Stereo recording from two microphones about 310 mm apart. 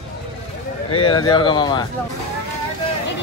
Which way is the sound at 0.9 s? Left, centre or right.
Centre.